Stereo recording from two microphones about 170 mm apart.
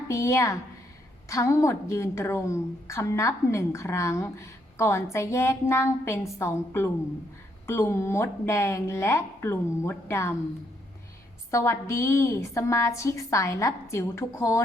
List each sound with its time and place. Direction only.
0.1 s a woman's voice: 15° left (ahead or behind)
11.5 s a woman's voice: 15° left (ahead or behind)